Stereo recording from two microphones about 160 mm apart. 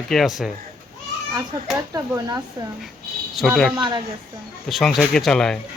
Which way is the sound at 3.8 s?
30° right (ahead or behind).